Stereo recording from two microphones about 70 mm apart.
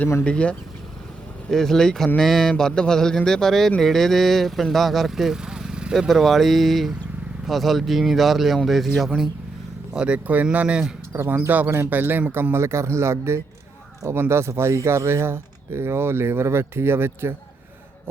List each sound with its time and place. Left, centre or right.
0.3 s mantra: centre
1.5 s speech: centre
2.1 s mantra: centre
3.2 s speech: centre
6.1 s speech: centre
9.9 s speech: centre
11.3 s speech: right